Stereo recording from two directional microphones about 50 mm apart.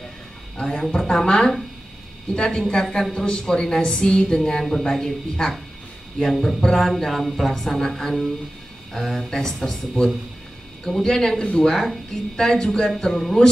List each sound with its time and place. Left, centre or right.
0.6 s a woman's voice: centre